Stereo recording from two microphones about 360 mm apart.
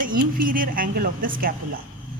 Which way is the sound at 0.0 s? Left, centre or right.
Right.